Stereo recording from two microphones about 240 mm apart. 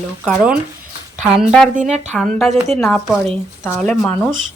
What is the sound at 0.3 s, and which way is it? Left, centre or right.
Speech, centre.